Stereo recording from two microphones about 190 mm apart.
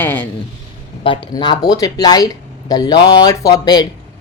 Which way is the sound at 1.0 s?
25° left (ahead or behind).